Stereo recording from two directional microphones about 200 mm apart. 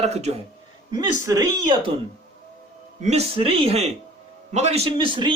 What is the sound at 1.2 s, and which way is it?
Speech, 15° right (ahead or behind).